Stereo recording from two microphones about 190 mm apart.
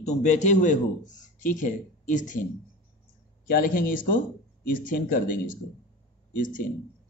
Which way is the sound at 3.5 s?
50° left (ahead or behind).